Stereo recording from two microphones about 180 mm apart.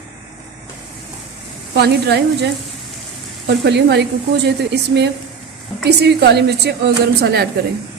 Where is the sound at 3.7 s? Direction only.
65° right (ahead or behind).